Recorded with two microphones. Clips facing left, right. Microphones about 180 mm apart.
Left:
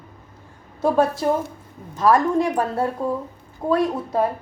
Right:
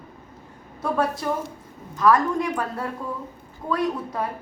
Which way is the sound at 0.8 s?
25° left (ahead or behind).